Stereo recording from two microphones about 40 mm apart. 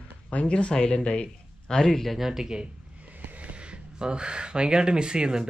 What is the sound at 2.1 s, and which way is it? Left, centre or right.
Speech, centre.